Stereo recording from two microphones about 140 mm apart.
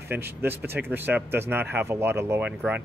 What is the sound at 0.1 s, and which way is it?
A man's voice, 15° right (ahead or behind).